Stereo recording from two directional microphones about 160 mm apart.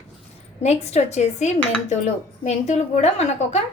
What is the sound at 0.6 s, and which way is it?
A woman's voice, 45° left (ahead or behind).